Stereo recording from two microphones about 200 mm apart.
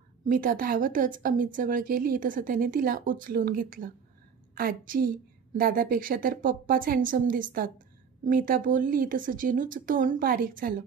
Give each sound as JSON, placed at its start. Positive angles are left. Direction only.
{"t": 0.2, "sound": "a woman's voice", "side_deg": -45}